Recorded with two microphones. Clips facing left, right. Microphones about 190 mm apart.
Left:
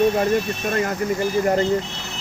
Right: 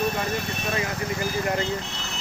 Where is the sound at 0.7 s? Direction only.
55° left (ahead or behind).